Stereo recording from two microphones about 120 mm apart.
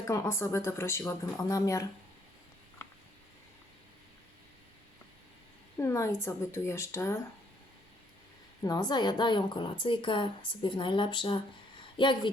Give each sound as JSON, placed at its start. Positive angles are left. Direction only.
{"t": 0.1, "sound": "speech", "side_deg": 25}
{"t": 5.7, "sound": "speech", "side_deg": 25}
{"t": 8.6, "sound": "a woman's voice", "side_deg": 35}